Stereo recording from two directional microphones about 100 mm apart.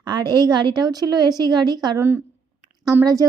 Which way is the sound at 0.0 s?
45° right (ahead or behind).